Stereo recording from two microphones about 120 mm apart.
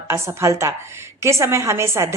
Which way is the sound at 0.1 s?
20° right (ahead or behind).